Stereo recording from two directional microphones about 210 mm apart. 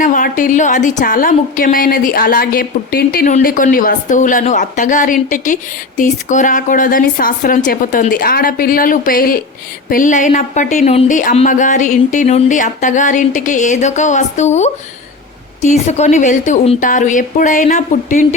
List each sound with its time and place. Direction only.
0.0 s a woman's voice: 40° left (ahead or behind)